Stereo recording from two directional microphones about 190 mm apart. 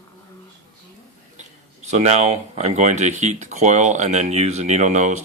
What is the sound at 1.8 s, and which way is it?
Speech, 35° right (ahead or behind).